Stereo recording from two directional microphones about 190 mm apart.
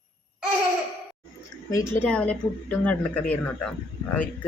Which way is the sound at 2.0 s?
5° left (ahead or behind).